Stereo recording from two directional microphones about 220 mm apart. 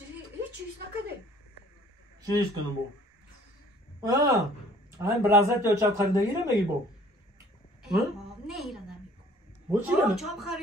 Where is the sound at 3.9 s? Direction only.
15° right (ahead or behind).